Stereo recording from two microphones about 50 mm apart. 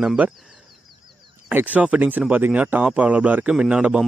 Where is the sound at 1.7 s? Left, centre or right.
Right.